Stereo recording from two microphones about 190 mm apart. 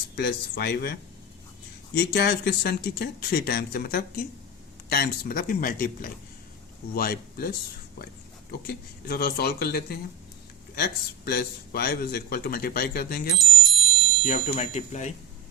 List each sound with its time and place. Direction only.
0.2 s speech: 60° left (ahead or behind)
2.0 s speech: 60° left (ahead or behind)
8.6 s speech: 50° left (ahead or behind)
13.4 s bicycle bell: centre (ahead or behind)
14.3 s speech: 35° left (ahead or behind)